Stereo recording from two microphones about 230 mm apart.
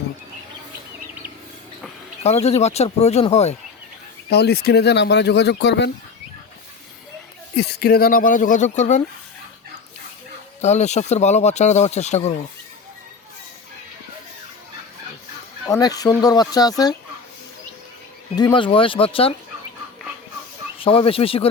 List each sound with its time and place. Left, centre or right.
2.2 s speech: left
4.3 s speech: left
7.5 s speech: left
10.6 s speech: left
15.6 s speech: centre
18.3 s speech: centre
20.7 s speech: left